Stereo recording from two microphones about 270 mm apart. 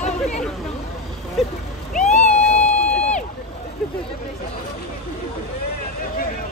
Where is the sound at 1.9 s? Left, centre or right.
Left.